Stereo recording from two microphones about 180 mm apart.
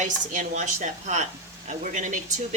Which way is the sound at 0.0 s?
45° right (ahead or behind).